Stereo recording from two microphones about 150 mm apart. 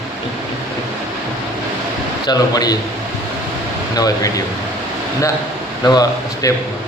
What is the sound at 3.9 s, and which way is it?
Speech, 25° left (ahead or behind).